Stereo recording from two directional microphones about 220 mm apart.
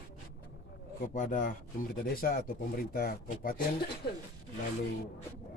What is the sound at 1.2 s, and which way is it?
Speech, 35° left (ahead or behind).